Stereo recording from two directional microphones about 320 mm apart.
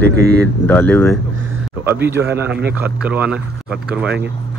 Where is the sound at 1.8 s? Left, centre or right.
Centre.